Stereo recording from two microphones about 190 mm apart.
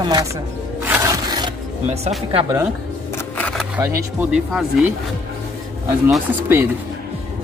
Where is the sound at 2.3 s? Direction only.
25° right (ahead or behind).